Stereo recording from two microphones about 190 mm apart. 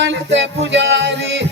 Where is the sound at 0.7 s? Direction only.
70° right (ahead or behind).